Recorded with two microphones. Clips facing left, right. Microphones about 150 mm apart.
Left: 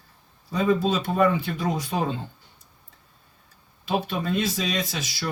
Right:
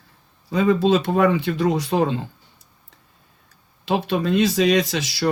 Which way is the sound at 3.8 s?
75° right (ahead or behind).